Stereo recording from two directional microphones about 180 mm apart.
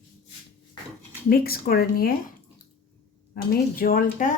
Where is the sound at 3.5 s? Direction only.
55° left (ahead or behind).